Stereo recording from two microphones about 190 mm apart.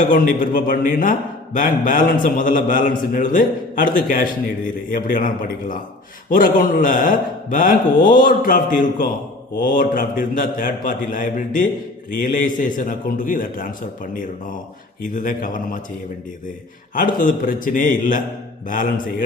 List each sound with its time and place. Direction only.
0.0 s a man's voice: 45° left (ahead or behind)
15.0 s a man's voice: 45° left (ahead or behind)
16.9 s a man's voice: 45° left (ahead or behind)